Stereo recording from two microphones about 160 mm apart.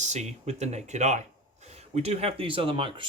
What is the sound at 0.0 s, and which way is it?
Speech, 45° right (ahead or behind).